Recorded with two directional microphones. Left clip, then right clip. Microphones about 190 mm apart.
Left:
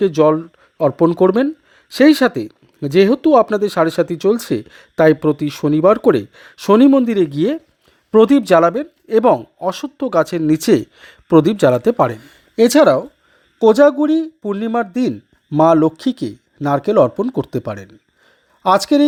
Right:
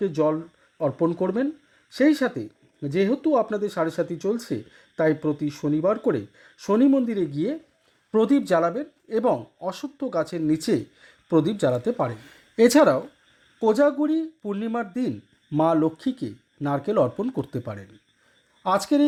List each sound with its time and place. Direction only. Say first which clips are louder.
0.0 s speech: left 10 dB; 30° left (ahead or behind)
12.2 s speech: left 5 dB; 15° left (ahead or behind)
13.6 s speech: left 10 dB; 35° left (ahead or behind)